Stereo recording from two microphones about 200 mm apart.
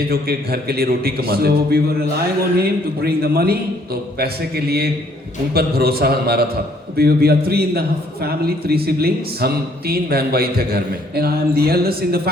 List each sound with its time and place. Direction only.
0.1 s a man's voice: 50° right (ahead or behind)